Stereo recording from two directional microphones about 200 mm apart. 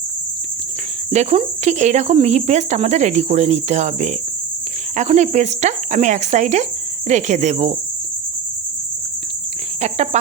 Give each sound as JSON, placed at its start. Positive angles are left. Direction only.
{"t": 1.1, "sound": "speech", "side_deg": -30}
{"t": 9.8, "sound": "speech", "side_deg": -35}